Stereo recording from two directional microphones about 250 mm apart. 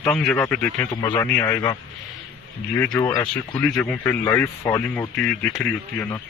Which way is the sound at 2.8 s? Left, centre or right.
Centre.